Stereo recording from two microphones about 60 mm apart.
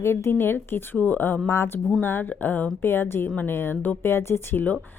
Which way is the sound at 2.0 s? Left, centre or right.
Left.